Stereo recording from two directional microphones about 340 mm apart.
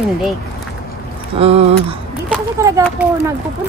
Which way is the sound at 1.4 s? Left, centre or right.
Centre.